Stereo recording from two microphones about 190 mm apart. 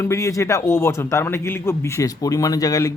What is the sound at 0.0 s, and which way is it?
A man's voice, 15° left (ahead or behind).